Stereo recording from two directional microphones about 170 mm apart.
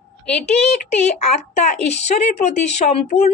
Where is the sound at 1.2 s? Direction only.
40° left (ahead or behind).